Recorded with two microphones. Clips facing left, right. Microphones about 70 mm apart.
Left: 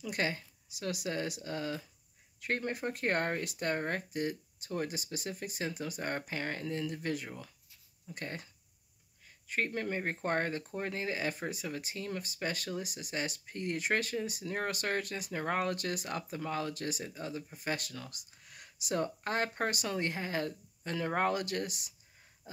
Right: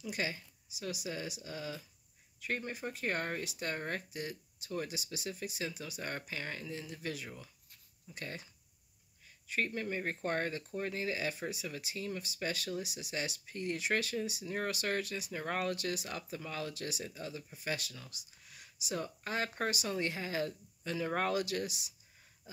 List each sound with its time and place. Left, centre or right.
0.0 s speech: left
9.5 s speech: left